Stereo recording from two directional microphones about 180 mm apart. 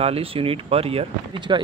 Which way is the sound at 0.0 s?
30° right (ahead or behind).